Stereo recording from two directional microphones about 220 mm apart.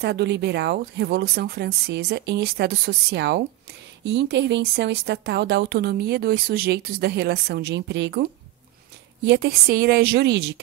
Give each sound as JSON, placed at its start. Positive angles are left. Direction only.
{"t": 0.0, "sound": "speech", "side_deg": -50}